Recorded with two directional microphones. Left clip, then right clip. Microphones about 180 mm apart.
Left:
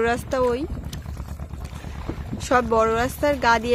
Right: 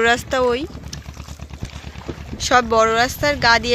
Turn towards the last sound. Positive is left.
turn(degrees=20)  # may be behind; listen again after turning